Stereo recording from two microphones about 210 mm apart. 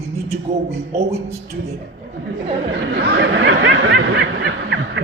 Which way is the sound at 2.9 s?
50° right (ahead or behind).